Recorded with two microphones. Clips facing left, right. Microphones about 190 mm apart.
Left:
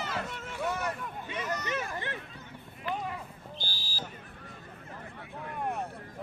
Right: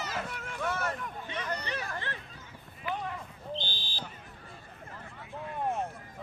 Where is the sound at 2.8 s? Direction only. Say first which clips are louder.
Left 1 dB; 5° left (ahead or behind).